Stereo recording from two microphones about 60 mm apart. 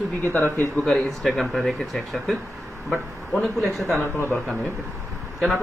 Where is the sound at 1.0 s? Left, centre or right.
Centre.